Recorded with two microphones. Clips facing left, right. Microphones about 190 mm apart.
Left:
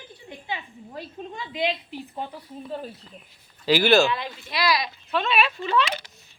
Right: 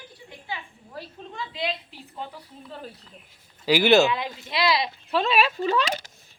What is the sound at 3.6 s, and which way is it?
Speech, 15° right (ahead or behind).